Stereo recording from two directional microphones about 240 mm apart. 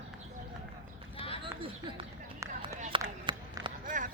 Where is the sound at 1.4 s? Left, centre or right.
Right.